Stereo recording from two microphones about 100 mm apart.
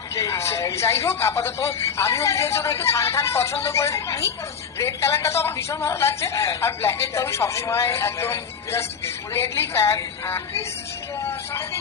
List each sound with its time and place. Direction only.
0.2 s a woman's voice: 30° left (ahead or behind)